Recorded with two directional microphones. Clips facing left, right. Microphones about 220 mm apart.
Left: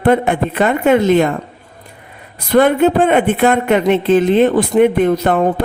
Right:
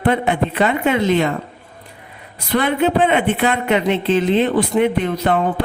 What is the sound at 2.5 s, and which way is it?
Speech, 50° left (ahead or behind).